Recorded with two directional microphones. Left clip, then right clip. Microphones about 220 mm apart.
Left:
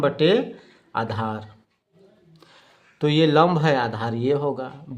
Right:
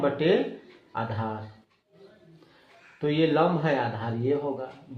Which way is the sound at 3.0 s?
35° left (ahead or behind).